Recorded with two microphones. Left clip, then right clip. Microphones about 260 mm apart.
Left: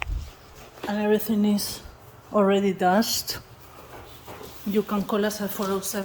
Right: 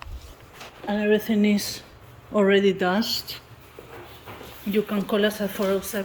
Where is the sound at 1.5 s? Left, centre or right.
Centre.